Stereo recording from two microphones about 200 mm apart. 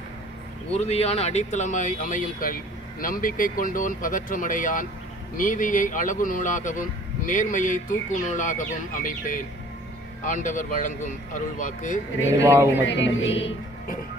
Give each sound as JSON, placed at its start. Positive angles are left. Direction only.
{"t": 0.7, "sound": "speech", "side_deg": 30}
{"t": 12.4, "sound": "speech", "side_deg": -10}
{"t": 12.8, "sound": "speech", "side_deg": 65}